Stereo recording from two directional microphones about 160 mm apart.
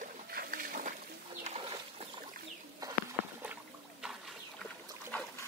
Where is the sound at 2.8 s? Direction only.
25° right (ahead or behind).